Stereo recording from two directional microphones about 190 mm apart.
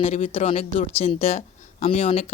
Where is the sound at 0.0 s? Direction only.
30° left (ahead or behind).